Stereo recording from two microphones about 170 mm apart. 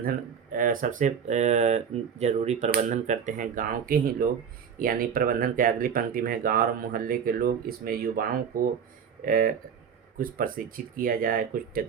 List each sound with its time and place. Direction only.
0.5 s speech: 55° right (ahead or behind)